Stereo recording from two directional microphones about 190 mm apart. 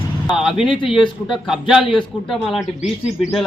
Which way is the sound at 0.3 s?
Centre (ahead or behind).